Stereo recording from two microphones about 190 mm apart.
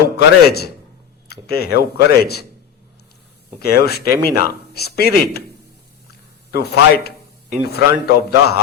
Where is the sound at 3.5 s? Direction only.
55° left (ahead or behind).